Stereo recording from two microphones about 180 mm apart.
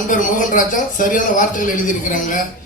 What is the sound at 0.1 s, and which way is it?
A man's voice, 45° left (ahead or behind).